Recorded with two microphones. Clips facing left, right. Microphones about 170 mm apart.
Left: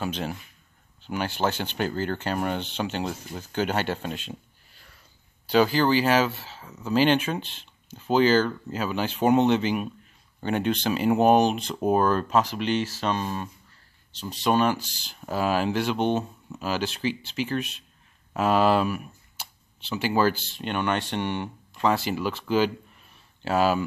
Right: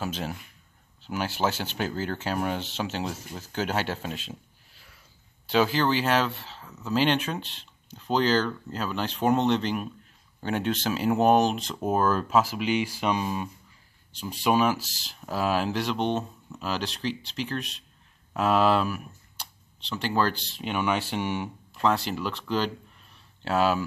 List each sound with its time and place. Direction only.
0.0 s speech: centre (ahead or behind)